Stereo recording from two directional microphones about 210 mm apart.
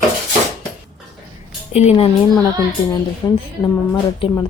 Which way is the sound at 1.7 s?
30° left (ahead or behind).